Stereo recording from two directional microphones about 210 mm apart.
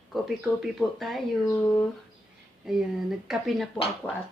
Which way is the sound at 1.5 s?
10° left (ahead or behind).